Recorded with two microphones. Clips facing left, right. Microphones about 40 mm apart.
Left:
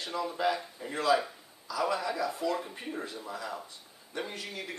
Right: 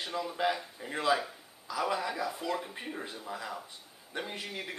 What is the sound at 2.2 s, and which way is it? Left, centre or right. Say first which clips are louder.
A man's voice: left 3 dB; centre.